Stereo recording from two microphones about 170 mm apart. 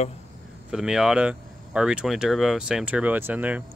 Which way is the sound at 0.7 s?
5° right (ahead or behind).